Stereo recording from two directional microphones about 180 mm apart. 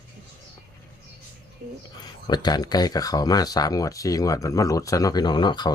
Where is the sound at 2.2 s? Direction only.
25° left (ahead or behind).